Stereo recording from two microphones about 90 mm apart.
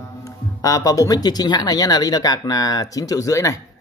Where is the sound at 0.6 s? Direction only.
40° left (ahead or behind).